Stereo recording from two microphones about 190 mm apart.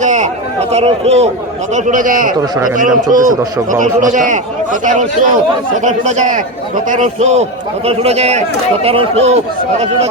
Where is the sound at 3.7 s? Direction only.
40° right (ahead or behind).